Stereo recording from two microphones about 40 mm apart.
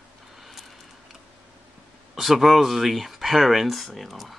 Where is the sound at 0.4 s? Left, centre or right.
Centre.